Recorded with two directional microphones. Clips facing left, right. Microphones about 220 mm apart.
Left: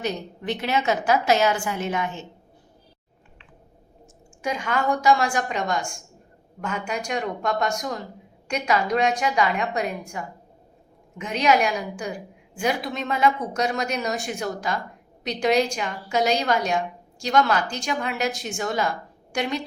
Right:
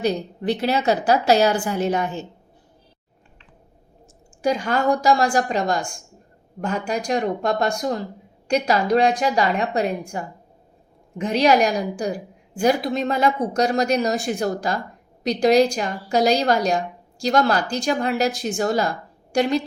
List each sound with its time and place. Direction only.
0.0 s a woman's voice: 35° right (ahead or behind)
4.4 s a woman's voice: 35° right (ahead or behind)